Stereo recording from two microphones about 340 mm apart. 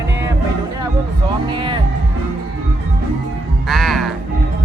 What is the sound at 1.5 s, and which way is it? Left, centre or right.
Music, centre.